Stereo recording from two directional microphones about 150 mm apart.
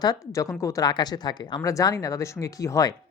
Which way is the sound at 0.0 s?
20° left (ahead or behind).